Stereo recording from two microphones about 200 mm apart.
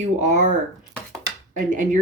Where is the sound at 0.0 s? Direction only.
35° right (ahead or behind).